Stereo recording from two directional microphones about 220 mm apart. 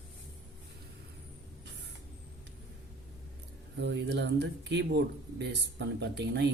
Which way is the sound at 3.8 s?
50° right (ahead or behind).